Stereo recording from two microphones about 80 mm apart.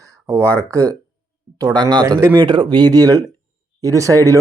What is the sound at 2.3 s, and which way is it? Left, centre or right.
Speech, right.